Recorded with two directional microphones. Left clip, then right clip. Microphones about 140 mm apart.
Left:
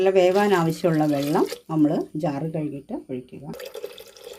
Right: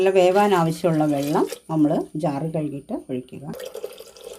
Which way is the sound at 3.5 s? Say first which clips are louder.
Right 2 dB; 5° left (ahead or behind).